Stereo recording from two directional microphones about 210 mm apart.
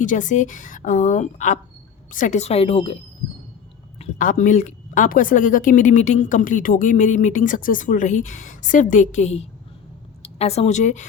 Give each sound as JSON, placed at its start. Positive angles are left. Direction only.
{"t": 0.0, "sound": "a woman's voice", "side_deg": 35}